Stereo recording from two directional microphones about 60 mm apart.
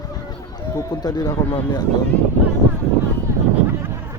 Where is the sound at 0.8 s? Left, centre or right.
Left.